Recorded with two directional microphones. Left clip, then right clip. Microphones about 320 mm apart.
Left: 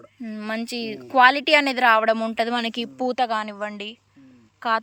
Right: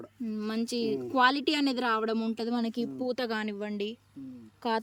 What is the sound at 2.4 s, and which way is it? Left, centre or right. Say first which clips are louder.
Speech: left 10 dB; centre.